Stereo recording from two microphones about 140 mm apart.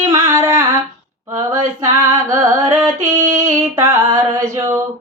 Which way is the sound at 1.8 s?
25° right (ahead or behind).